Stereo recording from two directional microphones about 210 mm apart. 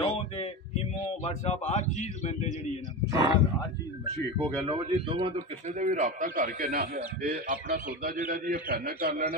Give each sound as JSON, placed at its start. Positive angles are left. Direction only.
{"t": 0.0, "sound": "a sound", "side_deg": 25}
{"t": 1.2, "sound": "speech", "side_deg": 30}
{"t": 3.1, "sound": "speech", "side_deg": -20}
{"t": 4.4, "sound": "speech", "side_deg": 5}
{"t": 4.6, "sound": "speech", "side_deg": -25}
{"t": 5.8, "sound": "a man's voice", "side_deg": -35}